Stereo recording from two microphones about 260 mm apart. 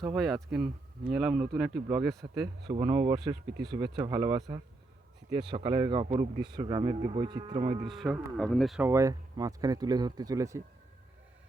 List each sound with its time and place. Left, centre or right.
0.5 s speech: centre
7.9 s speech: centre